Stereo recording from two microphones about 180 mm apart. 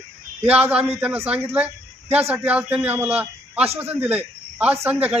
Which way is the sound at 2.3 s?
10° right (ahead or behind).